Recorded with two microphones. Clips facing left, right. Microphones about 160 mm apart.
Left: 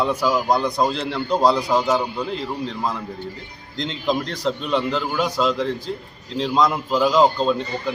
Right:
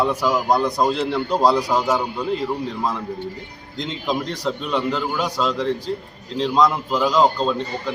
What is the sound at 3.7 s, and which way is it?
Speech, 5° right (ahead or behind).